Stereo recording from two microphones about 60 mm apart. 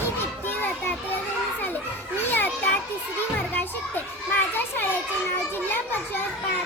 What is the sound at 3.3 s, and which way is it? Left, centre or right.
A child's voice, left.